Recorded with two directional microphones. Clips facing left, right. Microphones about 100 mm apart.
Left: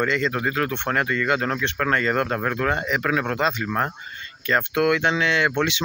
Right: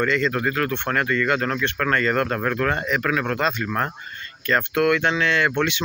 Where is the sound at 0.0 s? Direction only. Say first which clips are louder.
Right 1 dB; 20° left (ahead or behind).